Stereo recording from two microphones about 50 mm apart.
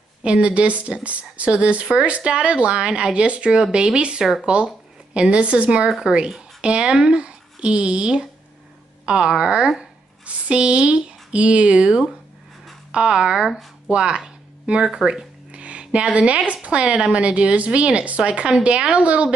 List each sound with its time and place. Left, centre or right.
0.2 s a woman's voice: right
5.9 s a woman's voice: centre
15.0 s music: centre
16.6 s a woman's voice: right